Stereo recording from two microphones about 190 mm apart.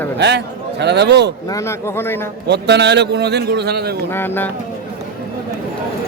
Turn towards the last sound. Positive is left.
turn(degrees=10)  # may be behind; listen again after turning